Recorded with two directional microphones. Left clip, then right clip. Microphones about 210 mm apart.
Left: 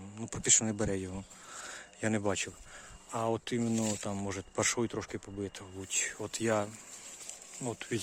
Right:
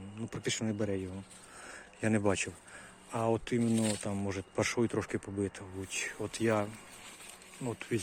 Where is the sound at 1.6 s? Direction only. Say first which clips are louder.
Even; 10° left (ahead or behind).